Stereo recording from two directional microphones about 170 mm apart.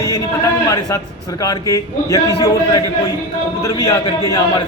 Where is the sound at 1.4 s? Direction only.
20° left (ahead or behind).